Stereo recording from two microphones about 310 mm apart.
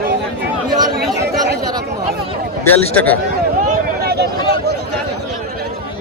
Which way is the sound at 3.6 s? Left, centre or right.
Right.